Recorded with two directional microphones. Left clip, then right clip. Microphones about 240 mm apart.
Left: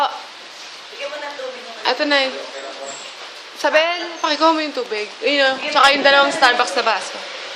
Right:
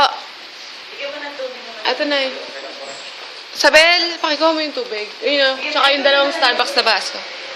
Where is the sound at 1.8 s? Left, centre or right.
Centre.